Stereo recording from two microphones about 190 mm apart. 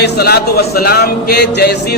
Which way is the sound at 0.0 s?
55° left (ahead or behind).